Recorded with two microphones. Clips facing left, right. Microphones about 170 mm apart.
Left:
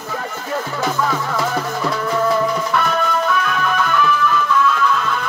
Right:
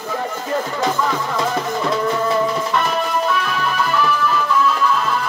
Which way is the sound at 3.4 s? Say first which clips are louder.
Left 1 dB; 35° right (ahead or behind).